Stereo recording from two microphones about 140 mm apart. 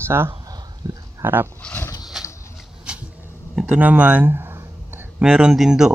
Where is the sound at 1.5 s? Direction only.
15° left (ahead or behind).